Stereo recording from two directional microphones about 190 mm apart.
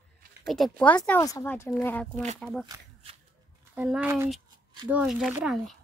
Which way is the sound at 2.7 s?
15° right (ahead or behind).